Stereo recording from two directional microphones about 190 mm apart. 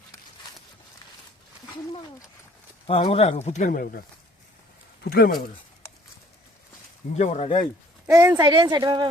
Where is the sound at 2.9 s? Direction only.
30° left (ahead or behind); by 4.0 s 45° left (ahead or behind).